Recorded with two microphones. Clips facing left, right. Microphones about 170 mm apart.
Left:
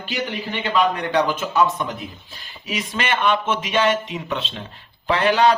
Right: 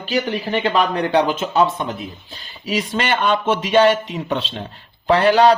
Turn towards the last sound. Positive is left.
turn(degrees=-35)  # may be behind; listen again after turning